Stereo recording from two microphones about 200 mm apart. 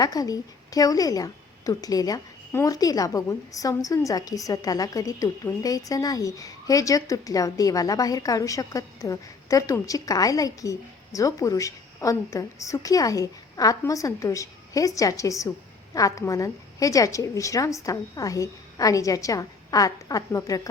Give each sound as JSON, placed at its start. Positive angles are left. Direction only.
{"t": 0.0, "sound": "a woman's voice", "side_deg": 20}